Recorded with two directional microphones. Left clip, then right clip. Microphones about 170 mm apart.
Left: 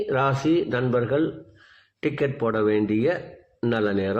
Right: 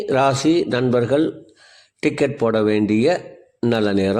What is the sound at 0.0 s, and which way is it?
Speech, 40° right (ahead or behind).